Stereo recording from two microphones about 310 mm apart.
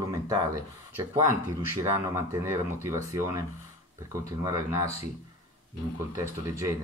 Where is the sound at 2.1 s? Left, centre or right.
Centre.